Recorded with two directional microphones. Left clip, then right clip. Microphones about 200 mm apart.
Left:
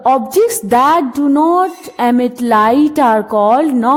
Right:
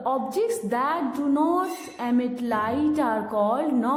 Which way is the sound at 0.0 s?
45° left (ahead or behind).